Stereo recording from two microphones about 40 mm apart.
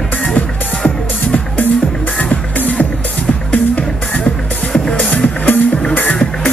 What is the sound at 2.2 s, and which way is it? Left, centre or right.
Music, left.